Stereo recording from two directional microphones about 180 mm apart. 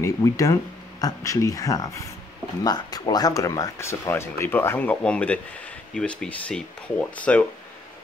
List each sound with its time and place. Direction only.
0.0 s speech: 20° left (ahead or behind)